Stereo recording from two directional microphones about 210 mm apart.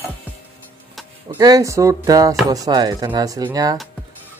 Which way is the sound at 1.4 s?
15° right (ahead or behind).